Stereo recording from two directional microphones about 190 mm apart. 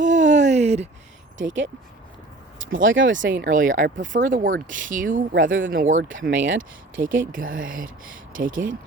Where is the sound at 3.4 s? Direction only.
45° right (ahead or behind).